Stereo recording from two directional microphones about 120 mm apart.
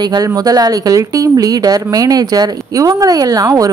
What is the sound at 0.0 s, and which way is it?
Speech, 35° right (ahead or behind).